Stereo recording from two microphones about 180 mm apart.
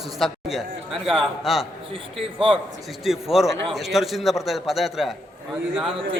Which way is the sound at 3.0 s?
Centre (ahead or behind).